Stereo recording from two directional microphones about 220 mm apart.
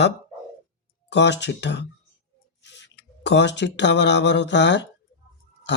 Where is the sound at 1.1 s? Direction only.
50° left (ahead or behind).